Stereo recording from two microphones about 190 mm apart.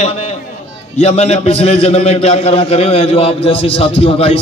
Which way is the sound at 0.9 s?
35° left (ahead or behind).